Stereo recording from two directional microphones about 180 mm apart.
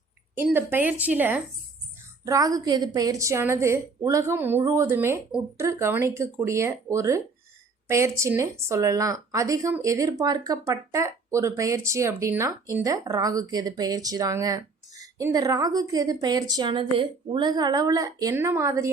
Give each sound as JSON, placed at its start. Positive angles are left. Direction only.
{"t": 0.3, "sound": "a woman's voice", "side_deg": -10}
{"t": 2.2, "sound": "a woman's voice", "side_deg": -20}